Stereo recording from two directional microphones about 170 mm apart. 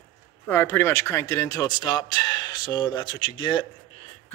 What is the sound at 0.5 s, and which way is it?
Speech, 15° left (ahead or behind).